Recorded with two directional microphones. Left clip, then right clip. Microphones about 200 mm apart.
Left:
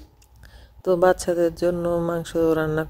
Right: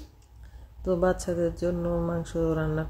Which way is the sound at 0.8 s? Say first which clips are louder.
Left 7 dB; 50° left (ahead or behind).